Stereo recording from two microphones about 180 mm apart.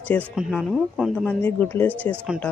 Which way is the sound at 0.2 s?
10° right (ahead or behind).